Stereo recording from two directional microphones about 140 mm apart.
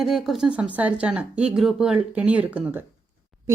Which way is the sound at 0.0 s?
Centre (ahead or behind).